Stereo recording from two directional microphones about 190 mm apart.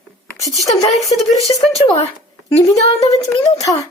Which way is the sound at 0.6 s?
20° left (ahead or behind).